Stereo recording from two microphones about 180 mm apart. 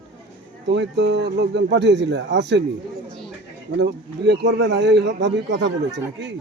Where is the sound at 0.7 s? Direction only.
75° right (ahead or behind).